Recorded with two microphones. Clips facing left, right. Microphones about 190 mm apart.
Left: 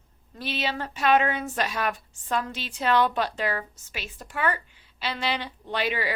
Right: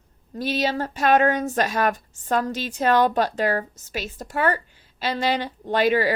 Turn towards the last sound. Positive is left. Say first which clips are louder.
# right 8 dB
turn(degrees=-45)  # may be behind; listen again after turning